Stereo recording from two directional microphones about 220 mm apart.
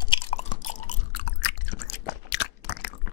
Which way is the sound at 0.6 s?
35° left (ahead or behind).